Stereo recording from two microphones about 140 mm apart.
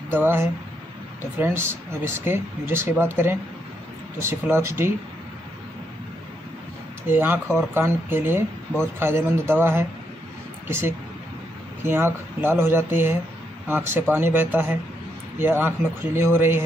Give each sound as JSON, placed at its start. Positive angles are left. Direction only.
{"t": 0.1, "sound": "speech", "side_deg": -15}
{"t": 7.1, "sound": "speech", "side_deg": -15}